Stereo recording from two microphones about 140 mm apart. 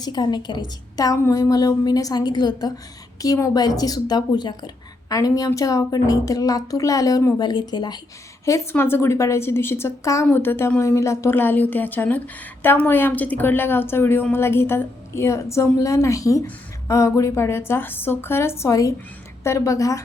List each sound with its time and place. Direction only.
0.0 s a woman's voice: 30° left (ahead or behind)
8.7 s a woman's voice: 15° left (ahead or behind)